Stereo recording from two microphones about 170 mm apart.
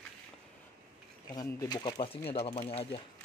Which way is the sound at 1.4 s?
20° left (ahead or behind).